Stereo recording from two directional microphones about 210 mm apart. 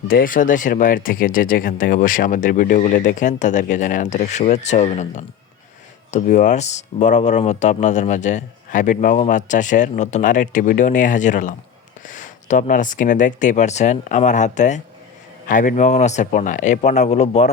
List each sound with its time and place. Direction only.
0.1 s speech: 40° left (ahead or behind)